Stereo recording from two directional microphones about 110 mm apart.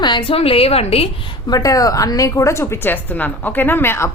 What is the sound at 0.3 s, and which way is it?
Speech, 60° left (ahead or behind).